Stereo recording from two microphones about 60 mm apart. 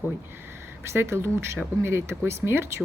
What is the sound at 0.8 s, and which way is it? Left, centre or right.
A woman's voice, right.